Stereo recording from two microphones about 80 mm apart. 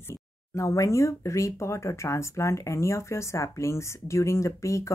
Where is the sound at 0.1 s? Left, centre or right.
Left.